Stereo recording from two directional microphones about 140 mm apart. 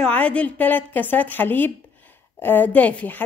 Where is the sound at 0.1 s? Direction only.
10° left (ahead or behind).